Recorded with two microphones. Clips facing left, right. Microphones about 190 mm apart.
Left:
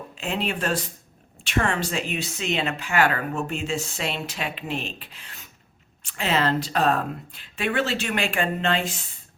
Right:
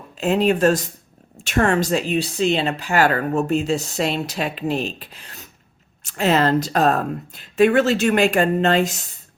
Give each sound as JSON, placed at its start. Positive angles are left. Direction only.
{"t": 0.2, "sound": "speech", "side_deg": -40}